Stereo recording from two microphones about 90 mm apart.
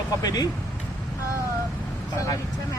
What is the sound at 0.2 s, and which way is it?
Speech, 45° left (ahead or behind).